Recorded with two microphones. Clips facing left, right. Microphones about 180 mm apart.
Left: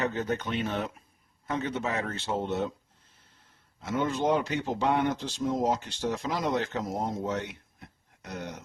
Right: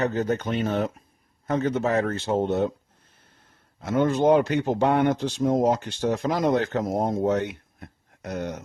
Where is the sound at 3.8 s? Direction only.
55° right (ahead or behind).